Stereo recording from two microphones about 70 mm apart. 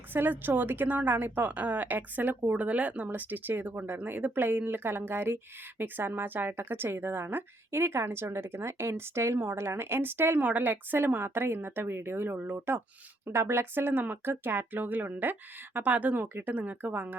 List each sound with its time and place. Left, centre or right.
0.1 s a woman's voice: right
16.2 s speech: right
16.5 s a woman's voice: right